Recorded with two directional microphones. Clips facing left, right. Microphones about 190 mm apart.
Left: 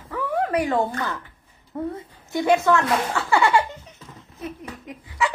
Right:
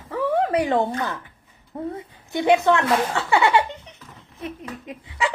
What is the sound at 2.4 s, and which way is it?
A woman's voice, 20° right (ahead or behind).